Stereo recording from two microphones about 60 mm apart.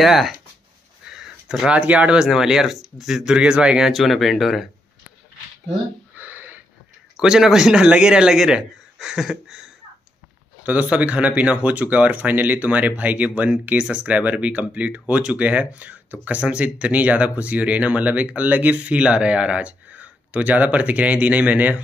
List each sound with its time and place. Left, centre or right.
0.0 s speech: centre
1.1 s a sound: centre
1.7 s speech: right
3.9 s speech: centre
6.1 s a sound: right
7.2 s speech: centre
10.6 s speech: right